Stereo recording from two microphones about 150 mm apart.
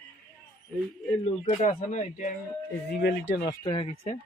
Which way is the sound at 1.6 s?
55° left (ahead or behind).